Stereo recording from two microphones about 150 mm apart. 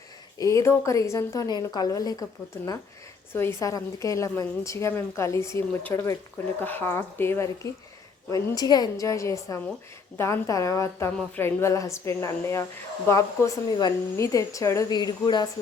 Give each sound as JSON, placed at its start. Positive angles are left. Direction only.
{"t": 0.3, "sound": "a woman's voice", "side_deg": 20}